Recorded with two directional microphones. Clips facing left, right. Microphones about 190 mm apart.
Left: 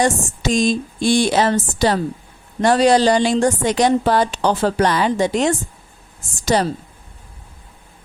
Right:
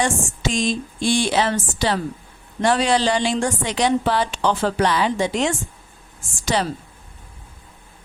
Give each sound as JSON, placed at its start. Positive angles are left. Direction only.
{"t": 0.0, "sound": "a woman's voice", "side_deg": 40}